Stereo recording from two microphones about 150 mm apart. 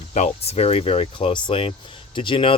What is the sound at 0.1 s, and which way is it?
Speech, 50° left (ahead or behind).